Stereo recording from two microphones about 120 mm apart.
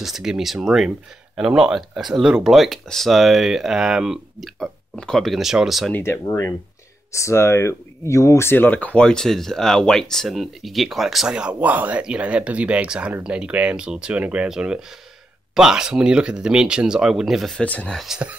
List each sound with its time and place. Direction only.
0.0 s speech: 5° right (ahead or behind)
5.9 s speech: 20° left (ahead or behind)
18.0 s speech: 5° right (ahead or behind)